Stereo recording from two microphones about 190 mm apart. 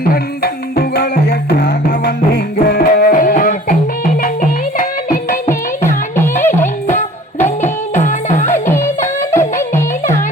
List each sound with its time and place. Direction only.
0.0 s music: 55° left (ahead or behind)
6.6 s music: 40° left (ahead or behind)
8.7 s music: 15° left (ahead or behind)